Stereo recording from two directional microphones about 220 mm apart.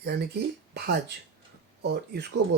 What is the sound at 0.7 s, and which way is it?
Speech, 50° right (ahead or behind).